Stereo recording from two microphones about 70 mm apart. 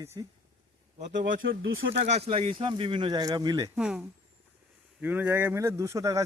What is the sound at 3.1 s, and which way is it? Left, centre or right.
Speech, right.